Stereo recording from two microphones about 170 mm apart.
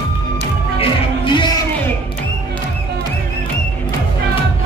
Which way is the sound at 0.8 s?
25° left (ahead or behind).